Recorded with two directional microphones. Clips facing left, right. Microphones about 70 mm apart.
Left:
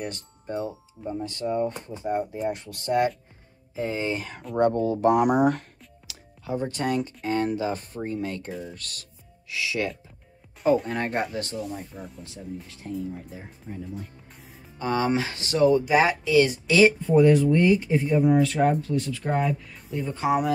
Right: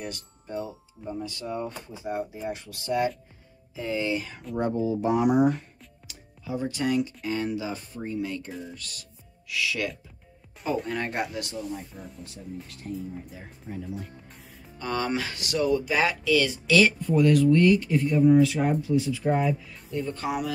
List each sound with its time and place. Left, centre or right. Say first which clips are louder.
0.0 s speech: left 3 dB; left
4.6 s speech: left 4 dB; left
6.5 s speech: even; left
9.5 s speech: left 1 dB; left
10.9 s speech: left 2 dB; left
11.5 s speech: left 2 dB; centre
14.8 s speech: left 4 dB; left
18.4 s speech: left 1 dB; centre
18.8 s speech: right 2 dB; centre